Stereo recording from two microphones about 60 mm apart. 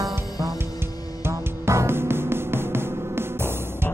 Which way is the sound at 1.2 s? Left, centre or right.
Right.